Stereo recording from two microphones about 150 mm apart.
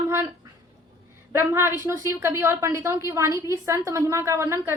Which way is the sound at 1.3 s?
15° right (ahead or behind).